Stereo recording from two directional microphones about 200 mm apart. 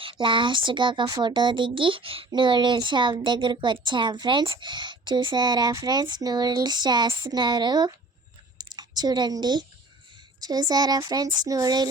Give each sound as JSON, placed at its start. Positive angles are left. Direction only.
{"t": 0.0, "sound": "speech", "side_deg": -25}